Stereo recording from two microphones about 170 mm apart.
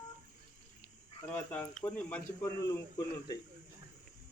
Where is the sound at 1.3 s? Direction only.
10° left (ahead or behind).